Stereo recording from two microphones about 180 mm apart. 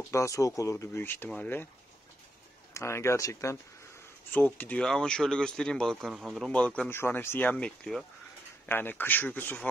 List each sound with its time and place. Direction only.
0.1 s speech: 15° left (ahead or behind)
2.7 s speech: 15° left (ahead or behind)
4.6 s speech: 5° left (ahead or behind)